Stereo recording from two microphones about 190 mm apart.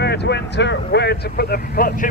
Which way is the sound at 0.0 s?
60° left (ahead or behind).